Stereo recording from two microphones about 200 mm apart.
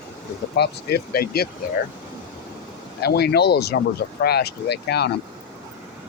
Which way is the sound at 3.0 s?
55° left (ahead or behind).